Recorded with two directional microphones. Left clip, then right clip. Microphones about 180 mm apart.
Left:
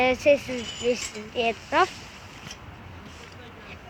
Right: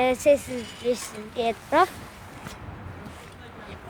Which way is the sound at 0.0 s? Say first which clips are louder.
Even; 15° right (ahead or behind).